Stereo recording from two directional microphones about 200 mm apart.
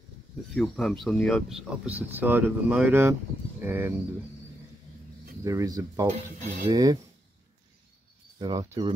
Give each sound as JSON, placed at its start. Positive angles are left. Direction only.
{"t": 0.6, "sound": "speech", "side_deg": 0}
{"t": 5.4, "sound": "speech", "side_deg": -15}
{"t": 8.4, "sound": "speech", "side_deg": -20}